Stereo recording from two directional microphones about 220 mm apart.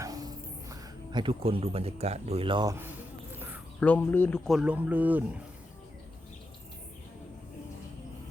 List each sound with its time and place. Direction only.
0.0 s music: 15° right (ahead or behind)
0.7 s speech: 20° right (ahead or behind)
3.3 s a sound: 10° right (ahead or behind)
3.8 s speech: 5° left (ahead or behind)